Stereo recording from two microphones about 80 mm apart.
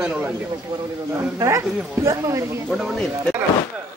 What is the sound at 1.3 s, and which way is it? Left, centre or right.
Speech, right.